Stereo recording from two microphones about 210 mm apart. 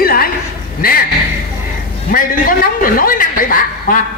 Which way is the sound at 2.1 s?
40° left (ahead or behind).